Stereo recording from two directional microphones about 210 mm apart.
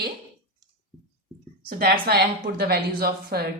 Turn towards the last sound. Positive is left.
turn(degrees=-45)  # may be behind; listen again after turning